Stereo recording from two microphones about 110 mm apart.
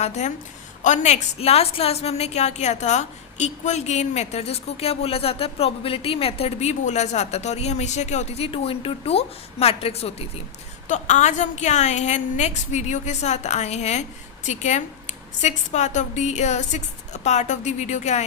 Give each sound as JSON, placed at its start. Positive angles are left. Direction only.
{"t": 0.0, "sound": "a woman's voice", "side_deg": 90}
{"t": 10.9, "sound": "a woman's voice", "side_deg": 90}